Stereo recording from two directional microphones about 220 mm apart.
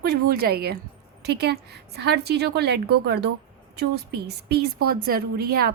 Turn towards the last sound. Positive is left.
turn(degrees=-45)  # may be behind; listen again after turning